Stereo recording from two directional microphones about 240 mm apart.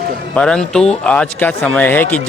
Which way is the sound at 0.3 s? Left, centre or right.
Centre.